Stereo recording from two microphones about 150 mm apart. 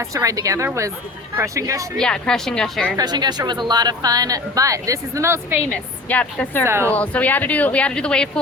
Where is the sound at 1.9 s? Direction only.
5° left (ahead or behind).